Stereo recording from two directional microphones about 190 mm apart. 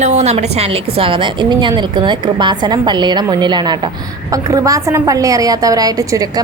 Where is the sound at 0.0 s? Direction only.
35° right (ahead or behind).